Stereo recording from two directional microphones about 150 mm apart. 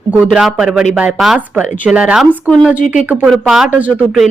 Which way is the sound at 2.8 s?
10° right (ahead or behind).